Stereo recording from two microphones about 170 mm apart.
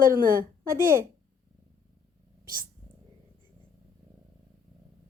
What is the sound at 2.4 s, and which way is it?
Speech, 60° right (ahead or behind).